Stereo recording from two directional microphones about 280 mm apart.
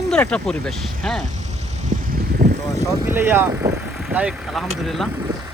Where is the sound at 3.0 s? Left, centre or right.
Centre.